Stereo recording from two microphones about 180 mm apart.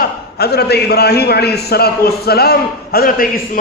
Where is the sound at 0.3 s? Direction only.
65° left (ahead or behind).